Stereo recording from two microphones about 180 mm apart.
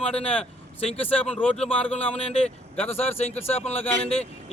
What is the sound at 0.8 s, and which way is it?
Speech, 35° left (ahead or behind).